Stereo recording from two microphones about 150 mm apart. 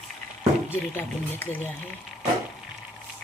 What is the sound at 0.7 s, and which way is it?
A woman's voice, 15° left (ahead or behind).